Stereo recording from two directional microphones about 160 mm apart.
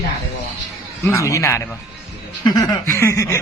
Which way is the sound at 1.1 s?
20° left (ahead or behind).